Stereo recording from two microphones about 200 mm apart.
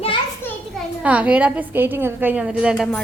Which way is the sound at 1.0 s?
5° right (ahead or behind).